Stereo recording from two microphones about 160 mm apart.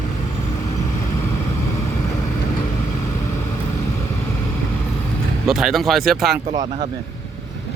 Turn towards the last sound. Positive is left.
turn(degrees=-30)  # may be behind; listen again after turning